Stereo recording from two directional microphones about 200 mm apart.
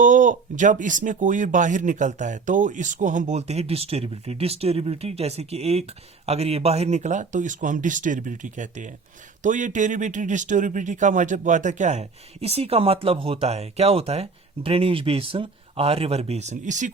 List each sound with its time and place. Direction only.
0.0 s speech: 40° right (ahead or behind)